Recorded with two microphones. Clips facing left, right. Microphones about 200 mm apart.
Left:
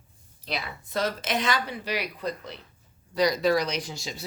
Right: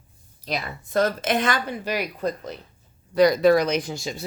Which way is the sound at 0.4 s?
45° right (ahead or behind).